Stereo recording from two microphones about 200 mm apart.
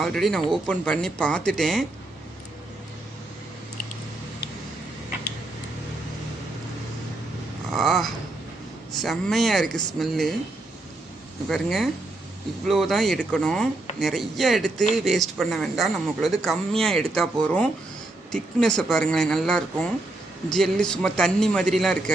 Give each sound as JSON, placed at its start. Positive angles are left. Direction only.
{"t": 0.0, "sound": "speech", "side_deg": 0}
{"t": 7.7, "sound": "a sound", "side_deg": 0}
{"t": 9.0, "sound": "speech", "side_deg": 0}
{"t": 11.4, "sound": "speech", "side_deg": 0}